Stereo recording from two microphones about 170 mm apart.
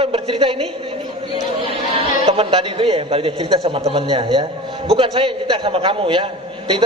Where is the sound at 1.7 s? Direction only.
35° right (ahead or behind).